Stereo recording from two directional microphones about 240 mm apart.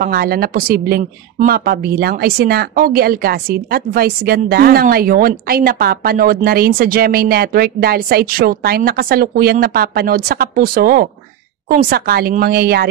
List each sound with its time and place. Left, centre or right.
0.0 s speech: right